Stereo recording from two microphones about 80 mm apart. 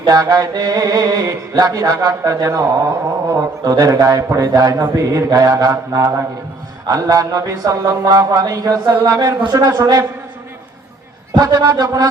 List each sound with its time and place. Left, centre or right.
0.0 s music: right
11.3 s speech: right